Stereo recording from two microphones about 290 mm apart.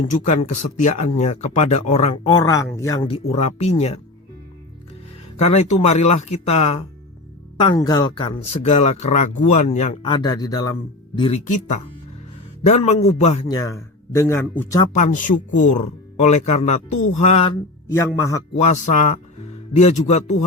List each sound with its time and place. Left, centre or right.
0.0 s speech: left
5.4 s speech: left
14.9 s speech: left; by 18.4 s centre
18.6 s speech: left